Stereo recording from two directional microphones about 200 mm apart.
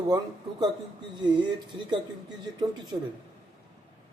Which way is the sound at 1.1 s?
20° right (ahead or behind).